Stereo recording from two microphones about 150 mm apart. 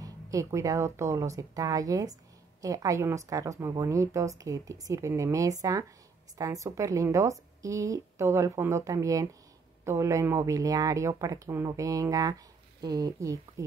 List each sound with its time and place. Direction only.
0.0 s a woman's voice: 20° right (ahead or behind)